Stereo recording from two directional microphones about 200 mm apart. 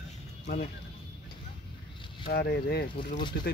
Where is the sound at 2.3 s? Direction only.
55° left (ahead or behind).